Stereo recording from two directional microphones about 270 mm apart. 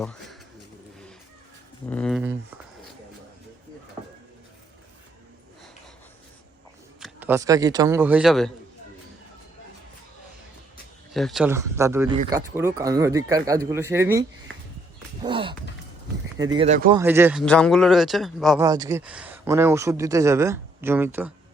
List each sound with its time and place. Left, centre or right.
0.0 s speech: centre
1.9 s speech: centre
7.0 s a man's voice: centre
11.1 s speech: centre; by 16.9 s right
16.9 s speech: centre
17.4 s speech: centre
18.6 s speech: centre